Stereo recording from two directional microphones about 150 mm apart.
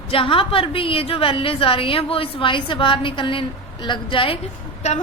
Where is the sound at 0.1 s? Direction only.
35° left (ahead or behind).